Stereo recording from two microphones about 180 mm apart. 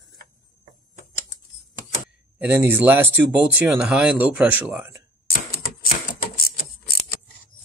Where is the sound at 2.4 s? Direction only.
10° right (ahead or behind).